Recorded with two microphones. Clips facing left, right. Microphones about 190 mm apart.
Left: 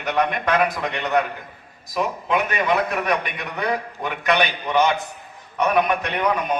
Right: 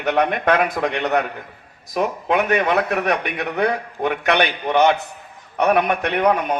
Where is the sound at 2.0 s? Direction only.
65° right (ahead or behind).